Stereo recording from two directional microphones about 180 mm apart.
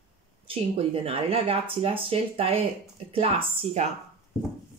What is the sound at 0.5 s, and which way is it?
Speech, 30° right (ahead or behind).